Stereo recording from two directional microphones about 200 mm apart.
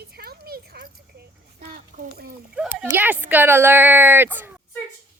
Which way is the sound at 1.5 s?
50° right (ahead or behind).